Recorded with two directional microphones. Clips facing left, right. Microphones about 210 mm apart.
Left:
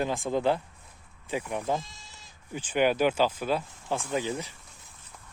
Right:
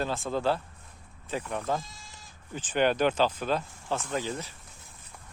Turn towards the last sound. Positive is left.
turn(degrees=15)  # may be behind; listen again after turning